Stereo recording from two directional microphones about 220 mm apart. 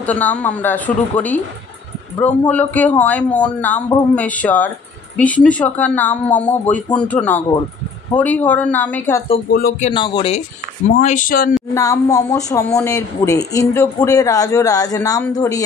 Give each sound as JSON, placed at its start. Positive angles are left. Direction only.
{"t": 0.0, "sound": "a man's voice", "side_deg": 5}
{"t": 9.5, "sound": "speech", "side_deg": 40}
{"t": 9.9, "sound": "speech", "side_deg": 20}
{"t": 11.0, "sound": "speech", "side_deg": 35}
{"t": 11.7, "sound": "a man's voice", "side_deg": 15}